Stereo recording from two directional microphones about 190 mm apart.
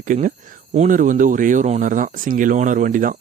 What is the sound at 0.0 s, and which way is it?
Speech, 45° right (ahead or behind).